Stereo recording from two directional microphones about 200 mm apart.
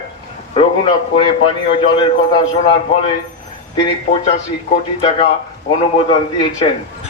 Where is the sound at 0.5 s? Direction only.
25° left (ahead or behind).